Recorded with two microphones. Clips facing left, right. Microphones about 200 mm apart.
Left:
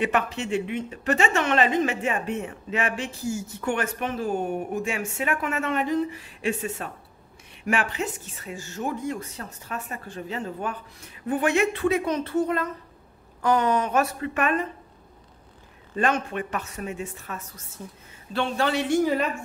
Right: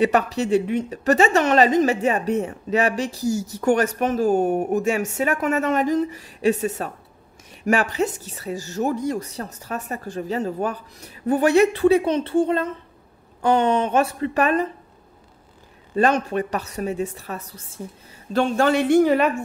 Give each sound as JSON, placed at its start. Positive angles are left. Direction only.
{"t": 0.0, "sound": "a woman's voice", "side_deg": -40}
{"t": 15.9, "sound": "a woman's voice", "side_deg": -35}